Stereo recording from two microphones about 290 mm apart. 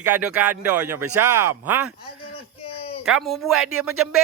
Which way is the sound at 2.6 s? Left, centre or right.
Centre.